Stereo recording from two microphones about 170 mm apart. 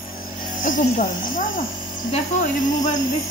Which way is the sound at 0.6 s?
50° left (ahead or behind).